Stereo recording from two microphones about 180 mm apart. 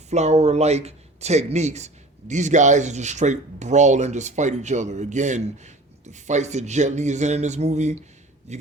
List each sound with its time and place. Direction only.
0.1 s speech: 40° right (ahead or behind)